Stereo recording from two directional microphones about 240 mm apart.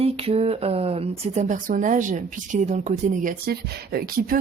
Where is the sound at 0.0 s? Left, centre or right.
Right.